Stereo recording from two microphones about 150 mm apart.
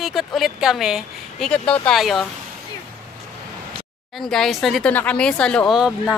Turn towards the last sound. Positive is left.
turn(degrees=0)  # may be behind; listen again after turning